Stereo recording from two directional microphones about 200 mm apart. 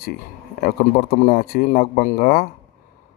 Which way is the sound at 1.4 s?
45° left (ahead or behind).